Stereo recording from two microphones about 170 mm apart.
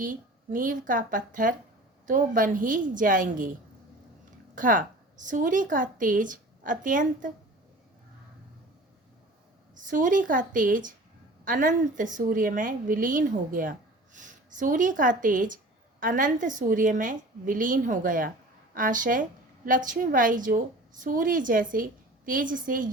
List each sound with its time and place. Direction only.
0.0 s a woman's voice: 50° right (ahead or behind)
4.5 s a woman's voice: 50° right (ahead or behind)
9.7 s a woman's voice: 50° right (ahead or behind)